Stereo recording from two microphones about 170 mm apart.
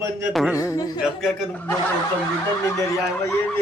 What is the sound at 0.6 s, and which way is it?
Speech, 20° left (ahead or behind).